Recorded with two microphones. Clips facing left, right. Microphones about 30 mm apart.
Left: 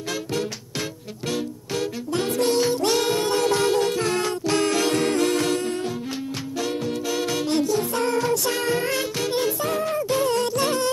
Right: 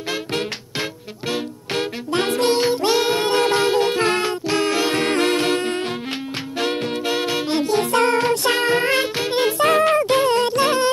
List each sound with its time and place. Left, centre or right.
1.7 s music: right
5.0 s music: right
7.6 s music: right
9.6 s music: right